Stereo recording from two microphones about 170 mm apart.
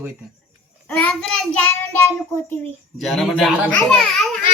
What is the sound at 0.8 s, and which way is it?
Child singing, 5° left (ahead or behind).